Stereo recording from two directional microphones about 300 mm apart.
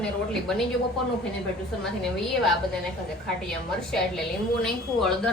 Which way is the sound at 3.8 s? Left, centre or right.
Centre.